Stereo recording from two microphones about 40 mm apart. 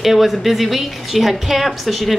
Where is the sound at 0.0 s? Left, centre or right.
Centre.